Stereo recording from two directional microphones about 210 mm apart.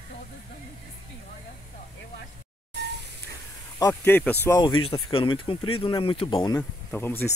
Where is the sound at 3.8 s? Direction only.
10° left (ahead or behind).